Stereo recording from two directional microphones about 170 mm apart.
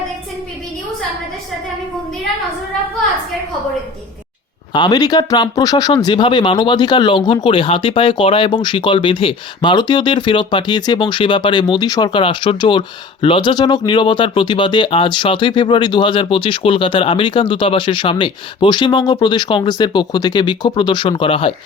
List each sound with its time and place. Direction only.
4.7 s speech: 25° left (ahead or behind)